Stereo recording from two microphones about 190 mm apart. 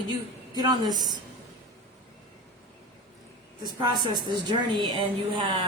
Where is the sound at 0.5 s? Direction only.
20° right (ahead or behind).